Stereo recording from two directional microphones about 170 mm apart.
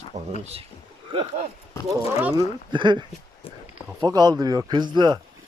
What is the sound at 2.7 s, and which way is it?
Speech, 25° right (ahead or behind).